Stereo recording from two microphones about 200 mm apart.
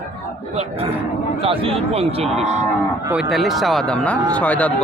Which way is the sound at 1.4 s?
30° right (ahead or behind).